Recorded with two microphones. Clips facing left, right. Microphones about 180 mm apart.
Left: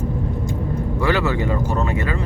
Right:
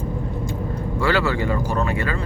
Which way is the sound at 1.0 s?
20° left (ahead or behind).